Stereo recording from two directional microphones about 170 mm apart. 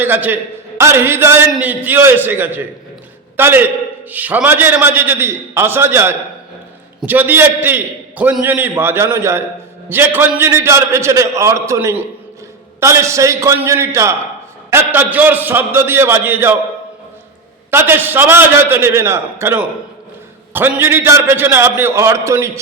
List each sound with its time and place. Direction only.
0.0 s a man's voice: 10° right (ahead or behind)
17.7 s a man's voice: 15° right (ahead or behind)